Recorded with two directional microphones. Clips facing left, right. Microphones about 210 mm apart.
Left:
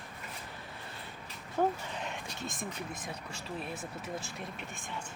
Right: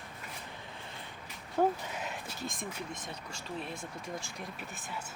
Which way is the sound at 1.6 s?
5° right (ahead or behind).